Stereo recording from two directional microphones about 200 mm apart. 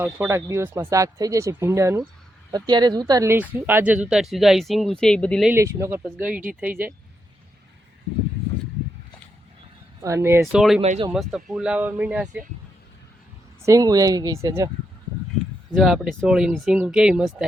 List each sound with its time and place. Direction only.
0.0 s speech: 10° right (ahead or behind); by 5.5 s 5° left (ahead or behind)
5.5 s speech: 15° right (ahead or behind)
10.0 s speech: 15° right (ahead or behind)
10.4 s speech: centre (ahead or behind)
10.8 s speech: 30° right (ahead or behind)
11.1 s speech: centre (ahead or behind)
13.6 s speech: 15° right (ahead or behind)
15.7 s speech: centre (ahead or behind)